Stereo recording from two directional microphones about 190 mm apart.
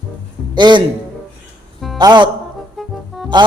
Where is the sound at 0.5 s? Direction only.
25° right (ahead or behind).